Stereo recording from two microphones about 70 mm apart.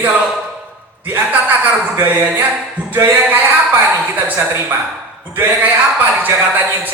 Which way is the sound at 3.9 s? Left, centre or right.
Right.